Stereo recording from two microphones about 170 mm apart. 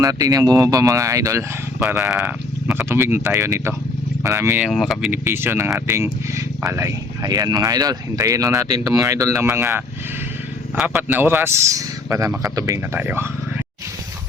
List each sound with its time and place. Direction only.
0.0 s speech: 20° right (ahead or behind)
1.8 s speech: 5° right (ahead or behind)
4.6 s speech: centre (ahead or behind)
5.1 s speech: 15° right (ahead or behind)
10.9 s speech: 10° right (ahead or behind)